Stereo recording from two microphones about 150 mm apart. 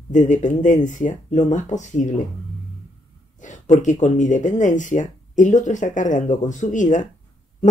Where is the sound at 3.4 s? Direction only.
55° left (ahead or behind).